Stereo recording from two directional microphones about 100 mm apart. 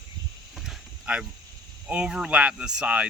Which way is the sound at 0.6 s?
10° right (ahead or behind).